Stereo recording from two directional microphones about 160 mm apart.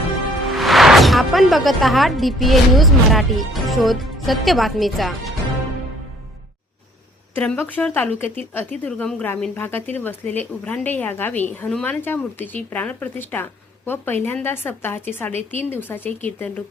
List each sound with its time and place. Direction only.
0.4 s speech: centre (ahead or behind)
7.3 s a woman's voice: 10° left (ahead or behind)